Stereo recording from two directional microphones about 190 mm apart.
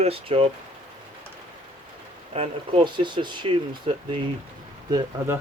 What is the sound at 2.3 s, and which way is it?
Speech, 30° right (ahead or behind).